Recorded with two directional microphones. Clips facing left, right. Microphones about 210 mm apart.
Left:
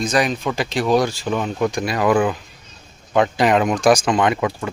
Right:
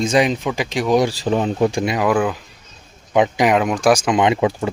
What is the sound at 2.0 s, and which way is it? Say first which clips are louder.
Speech: left 2 dB; 5° right (ahead or behind).